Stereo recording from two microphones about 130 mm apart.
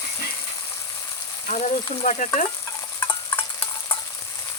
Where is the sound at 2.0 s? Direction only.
70° left (ahead or behind).